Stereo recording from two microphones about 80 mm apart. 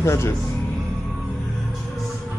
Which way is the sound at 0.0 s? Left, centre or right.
Left.